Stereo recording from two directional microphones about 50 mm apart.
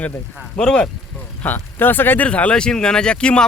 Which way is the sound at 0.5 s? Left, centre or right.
Left.